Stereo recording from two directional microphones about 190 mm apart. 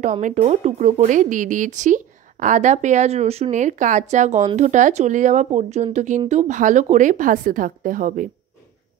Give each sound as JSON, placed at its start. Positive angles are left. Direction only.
{"t": 0.0, "sound": "speech", "side_deg": -40}